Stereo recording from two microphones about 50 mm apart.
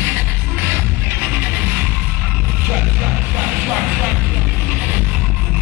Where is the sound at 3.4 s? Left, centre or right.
Right.